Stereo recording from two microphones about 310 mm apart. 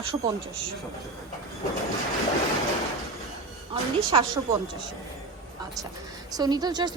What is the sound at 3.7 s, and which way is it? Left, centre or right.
Speech, centre.